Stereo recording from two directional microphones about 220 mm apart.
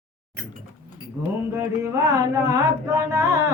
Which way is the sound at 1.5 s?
15° right (ahead or behind).